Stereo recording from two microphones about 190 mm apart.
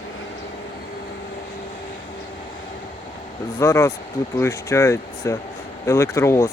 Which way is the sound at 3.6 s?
15° left (ahead or behind).